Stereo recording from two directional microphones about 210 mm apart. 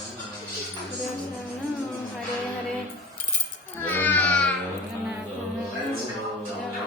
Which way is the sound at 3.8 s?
10° left (ahead or behind).